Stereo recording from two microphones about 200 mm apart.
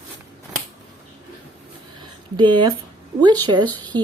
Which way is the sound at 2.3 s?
25° right (ahead or behind).